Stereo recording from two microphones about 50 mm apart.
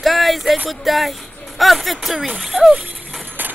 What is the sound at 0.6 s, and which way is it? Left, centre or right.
A woman's voice, centre.